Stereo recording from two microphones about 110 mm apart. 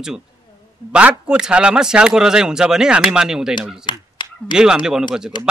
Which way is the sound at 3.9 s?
45° left (ahead or behind).